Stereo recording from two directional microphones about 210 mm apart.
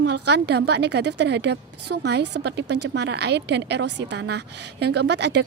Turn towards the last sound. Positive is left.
turn(degrees=-55)  # may be behind; listen again after turning